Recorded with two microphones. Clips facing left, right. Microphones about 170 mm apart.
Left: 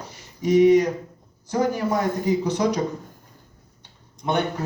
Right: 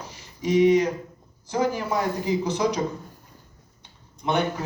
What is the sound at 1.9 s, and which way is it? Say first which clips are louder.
Speech: left 2 dB; 50° left (ahead or behind).